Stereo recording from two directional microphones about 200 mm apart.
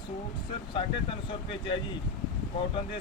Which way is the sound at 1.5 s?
25° left (ahead or behind).